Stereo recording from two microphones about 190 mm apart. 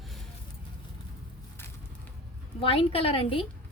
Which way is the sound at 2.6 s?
30° left (ahead or behind).